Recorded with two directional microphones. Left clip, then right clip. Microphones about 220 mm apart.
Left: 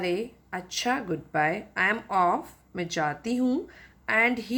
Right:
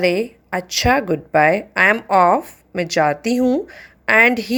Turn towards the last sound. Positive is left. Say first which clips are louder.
# right 11 dB
turn(degrees=-35)  # may be behind; listen again after turning